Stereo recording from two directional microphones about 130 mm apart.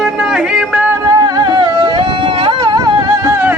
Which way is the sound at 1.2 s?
30° right (ahead or behind).